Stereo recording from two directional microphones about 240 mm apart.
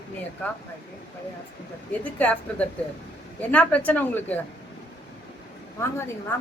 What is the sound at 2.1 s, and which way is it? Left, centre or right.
A woman's voice, centre.